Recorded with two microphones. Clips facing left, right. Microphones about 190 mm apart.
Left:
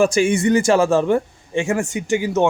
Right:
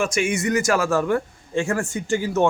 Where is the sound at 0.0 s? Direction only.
35° left (ahead or behind).